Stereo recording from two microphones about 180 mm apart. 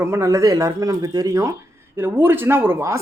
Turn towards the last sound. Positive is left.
turn(degrees=-15)  # may be behind; listen again after turning